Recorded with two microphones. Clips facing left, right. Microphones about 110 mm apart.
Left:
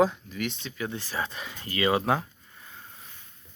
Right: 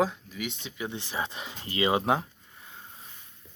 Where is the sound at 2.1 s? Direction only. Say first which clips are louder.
Even; 25° right (ahead or behind).